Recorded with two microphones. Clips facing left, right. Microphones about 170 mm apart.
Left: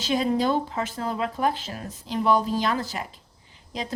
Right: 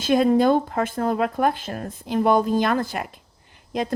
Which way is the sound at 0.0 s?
55° right (ahead or behind).